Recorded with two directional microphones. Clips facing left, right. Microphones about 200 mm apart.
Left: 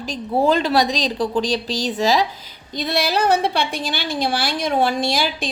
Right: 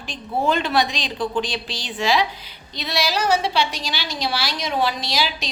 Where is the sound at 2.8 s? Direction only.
55° left (ahead or behind).